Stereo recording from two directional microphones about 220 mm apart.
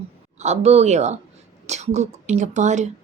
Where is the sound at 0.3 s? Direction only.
30° right (ahead or behind).